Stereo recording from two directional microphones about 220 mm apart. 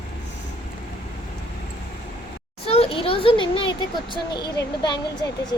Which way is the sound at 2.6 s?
25° left (ahead or behind).